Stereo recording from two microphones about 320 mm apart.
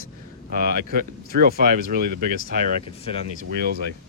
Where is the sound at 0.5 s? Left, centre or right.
Right.